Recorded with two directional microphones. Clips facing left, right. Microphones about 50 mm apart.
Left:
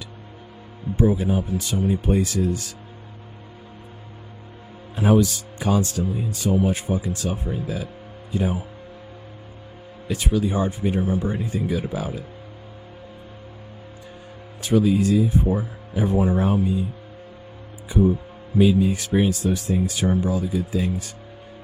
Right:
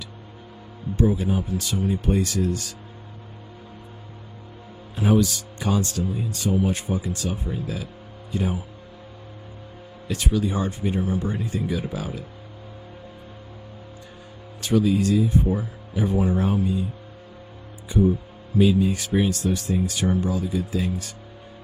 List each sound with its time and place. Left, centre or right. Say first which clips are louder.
0.9 s a man's voice: left 2 dB; centre
5.0 s speech: left 2 dB; centre
10.2 s speech: left 2 dB; centre
11.9 s speech: left 3 dB; centre
14.6 s speech: left 2 dB; centre
18.6 s speech: left 1 dB; centre